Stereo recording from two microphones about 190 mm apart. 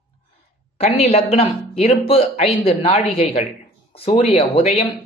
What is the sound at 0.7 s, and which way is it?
Speech, 30° left (ahead or behind).